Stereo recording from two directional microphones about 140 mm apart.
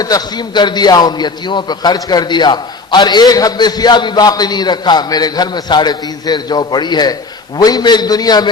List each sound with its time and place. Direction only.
0.0 s a man's voice: 30° left (ahead or behind)